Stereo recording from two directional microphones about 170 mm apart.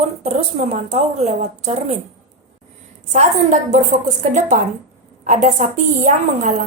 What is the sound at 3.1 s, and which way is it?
A woman's voice, 45° right (ahead or behind).